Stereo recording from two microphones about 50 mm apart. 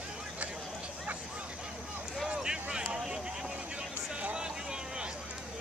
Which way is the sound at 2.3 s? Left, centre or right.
Centre.